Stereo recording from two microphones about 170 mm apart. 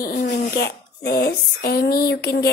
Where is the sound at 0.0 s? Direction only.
75° left (ahead or behind).